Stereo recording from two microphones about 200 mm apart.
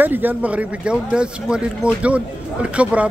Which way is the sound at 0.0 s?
10° right (ahead or behind).